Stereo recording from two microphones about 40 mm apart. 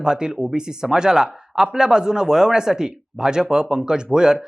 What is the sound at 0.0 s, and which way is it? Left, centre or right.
Speech, centre.